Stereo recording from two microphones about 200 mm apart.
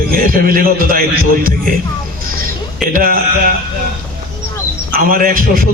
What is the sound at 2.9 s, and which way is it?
Speech, 45° right (ahead or behind).